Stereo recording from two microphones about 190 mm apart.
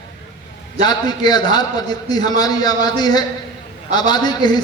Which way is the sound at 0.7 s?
20° left (ahead or behind).